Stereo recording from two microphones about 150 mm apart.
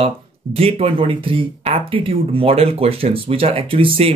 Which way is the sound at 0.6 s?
40° right (ahead or behind).